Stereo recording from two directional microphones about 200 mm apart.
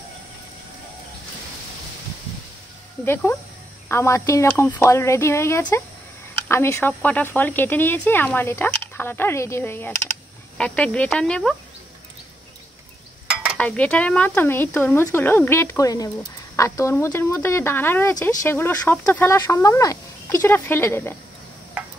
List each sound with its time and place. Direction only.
3.1 s speech: 10° left (ahead or behind)
13.3 s a sound: 5° right (ahead or behind)
13.6 s speech: 5° left (ahead or behind)